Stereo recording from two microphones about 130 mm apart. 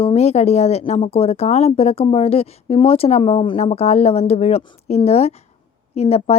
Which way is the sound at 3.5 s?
55° left (ahead or behind).